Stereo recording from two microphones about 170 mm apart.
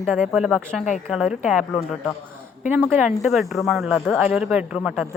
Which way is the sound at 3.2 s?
Centre (ahead or behind).